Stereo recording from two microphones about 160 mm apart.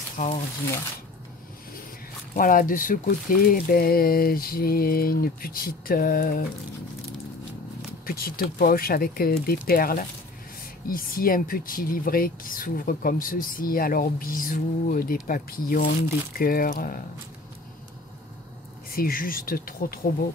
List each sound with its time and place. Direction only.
0.2 s speech: 50° left (ahead or behind)
2.3 s speech: 60° left (ahead or behind)
8.0 s speech: 70° left (ahead or behind)
18.9 s speech: 65° left (ahead or behind)